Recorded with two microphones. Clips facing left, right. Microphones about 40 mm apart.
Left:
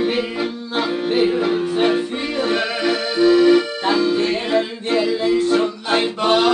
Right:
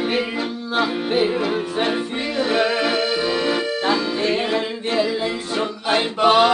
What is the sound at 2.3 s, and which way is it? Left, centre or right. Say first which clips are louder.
Accordion: right 2 dB; centre.